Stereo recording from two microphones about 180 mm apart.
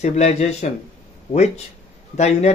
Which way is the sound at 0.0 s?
40° left (ahead or behind).